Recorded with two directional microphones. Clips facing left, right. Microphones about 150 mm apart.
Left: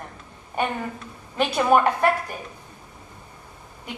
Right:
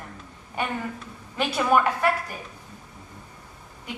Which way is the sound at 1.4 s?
40° left (ahead or behind).